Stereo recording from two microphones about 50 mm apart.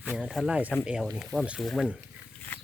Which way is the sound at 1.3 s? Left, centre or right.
Centre.